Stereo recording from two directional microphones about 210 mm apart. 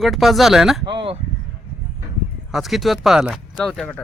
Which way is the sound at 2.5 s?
Centre (ahead or behind).